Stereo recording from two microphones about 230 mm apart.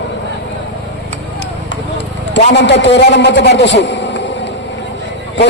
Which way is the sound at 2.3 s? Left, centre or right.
Left.